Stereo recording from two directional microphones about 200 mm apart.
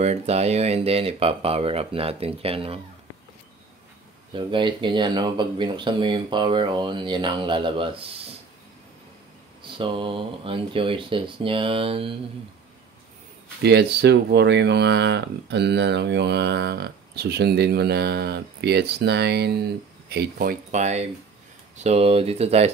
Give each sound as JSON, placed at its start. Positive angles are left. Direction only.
{"t": 0.0, "sound": "speech", "side_deg": -30}
{"t": 4.3, "sound": "speech", "side_deg": -25}
{"t": 9.6, "sound": "speech", "side_deg": -25}
{"t": 13.6, "sound": "speech", "side_deg": -55}